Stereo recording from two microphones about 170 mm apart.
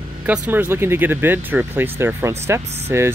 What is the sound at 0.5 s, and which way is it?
Speech, 10° right (ahead or behind).